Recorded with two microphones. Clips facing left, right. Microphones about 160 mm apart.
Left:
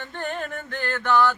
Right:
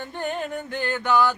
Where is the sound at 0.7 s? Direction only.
15° right (ahead or behind).